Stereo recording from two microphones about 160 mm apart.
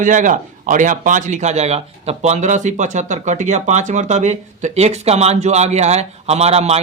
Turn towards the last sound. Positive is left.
turn(degrees=-40)  # may be behind; listen again after turning